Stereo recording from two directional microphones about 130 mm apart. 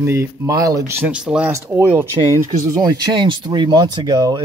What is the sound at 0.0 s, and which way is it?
Speech, 20° right (ahead or behind).